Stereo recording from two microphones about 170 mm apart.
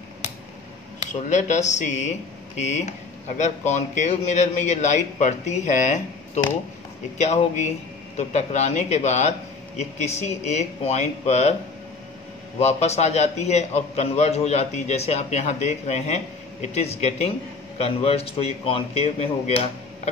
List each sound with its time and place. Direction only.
0.9 s a man's voice: 45° left (ahead or behind)
12.5 s a man's voice: 40° left (ahead or behind)